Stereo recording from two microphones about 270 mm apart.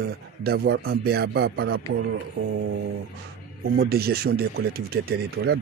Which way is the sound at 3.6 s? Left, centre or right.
Right.